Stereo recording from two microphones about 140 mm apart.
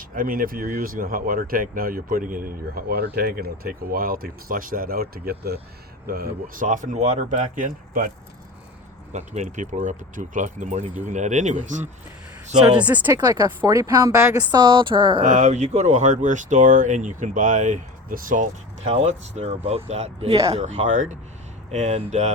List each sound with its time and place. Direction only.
0.1 s speech: 90° right; by 8.1 s 70° right (ahead or behind)
9.1 s speech: 55° right (ahead or behind)
12.7 s speech: 10° right (ahead or behind)
13.1 s speech: 30° right (ahead or behind)
14.5 s speech: 35° right (ahead or behind)
15.2 s speech: 60° right (ahead or behind)
18.9 s speech: 50° right (ahead or behind)